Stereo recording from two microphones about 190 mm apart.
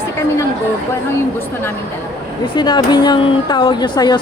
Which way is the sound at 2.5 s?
25° left (ahead or behind).